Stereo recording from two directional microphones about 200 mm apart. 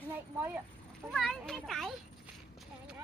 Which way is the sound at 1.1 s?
Centre (ahead or behind).